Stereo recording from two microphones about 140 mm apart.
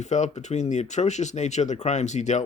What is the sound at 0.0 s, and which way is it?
Speech, 55° left (ahead or behind).